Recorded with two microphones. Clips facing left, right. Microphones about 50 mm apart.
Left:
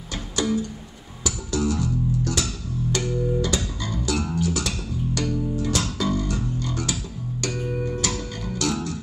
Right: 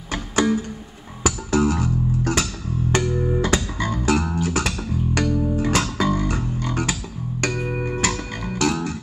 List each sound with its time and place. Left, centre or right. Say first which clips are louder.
0.1 s music: right 4 dB; right
1.2 s bass guitar: right 6 dB; right
2.9 s music: right 6 dB; right
3.3 s bass guitar: right 4 dB; right
5.3 s music: right 4 dB; right